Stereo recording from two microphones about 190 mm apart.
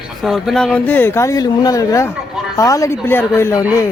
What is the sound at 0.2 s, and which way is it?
Speech, centre (ahead or behind).